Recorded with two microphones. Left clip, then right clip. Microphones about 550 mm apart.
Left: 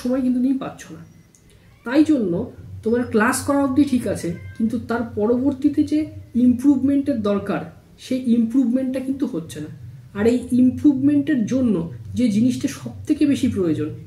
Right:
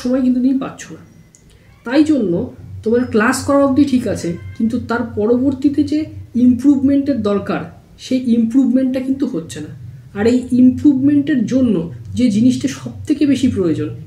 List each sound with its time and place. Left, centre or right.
0.1 s speech: left
1.9 s speech: left